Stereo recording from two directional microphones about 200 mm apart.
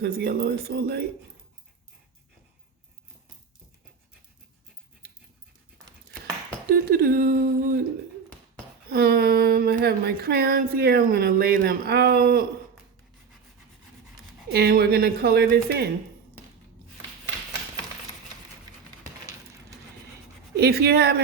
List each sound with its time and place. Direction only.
0.0 s a woman's voice: 55° right (ahead or behind)
6.7 s a woman's voice: 50° right (ahead or behind)
8.9 s a sound: 50° right (ahead or behind)
14.5 s a woman's voice: 50° right (ahead or behind)
20.6 s a woman's voice: 50° right (ahead or behind)